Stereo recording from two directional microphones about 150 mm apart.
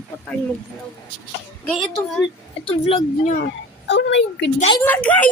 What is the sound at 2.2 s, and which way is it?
Speech, 40° left (ahead or behind).